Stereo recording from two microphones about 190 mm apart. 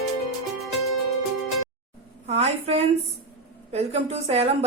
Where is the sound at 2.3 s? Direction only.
35° right (ahead or behind).